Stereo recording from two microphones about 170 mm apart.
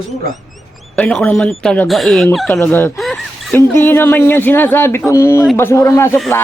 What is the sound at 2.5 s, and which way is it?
Speech, 10° left (ahead or behind).